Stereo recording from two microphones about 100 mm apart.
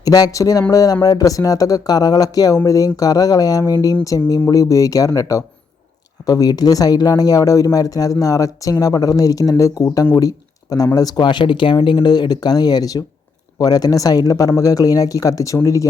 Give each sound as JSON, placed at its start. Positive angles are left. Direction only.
{"t": 0.0, "sound": "speech", "side_deg": 40}